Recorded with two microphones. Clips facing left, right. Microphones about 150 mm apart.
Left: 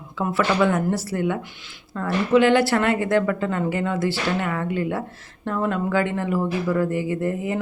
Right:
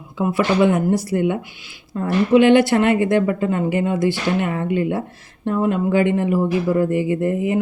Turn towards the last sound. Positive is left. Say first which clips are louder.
# right 5 dB
turn(degrees=-20)  # may be behind; listen again after turning